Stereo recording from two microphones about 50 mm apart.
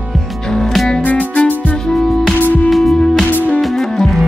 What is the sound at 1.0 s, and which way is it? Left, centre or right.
Music, left.